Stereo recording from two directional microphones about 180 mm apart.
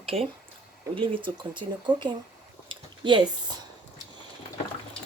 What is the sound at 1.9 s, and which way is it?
Speech, 10° right (ahead or behind).